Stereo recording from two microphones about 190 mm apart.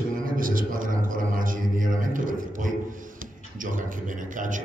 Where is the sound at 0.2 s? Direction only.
45° right (ahead or behind).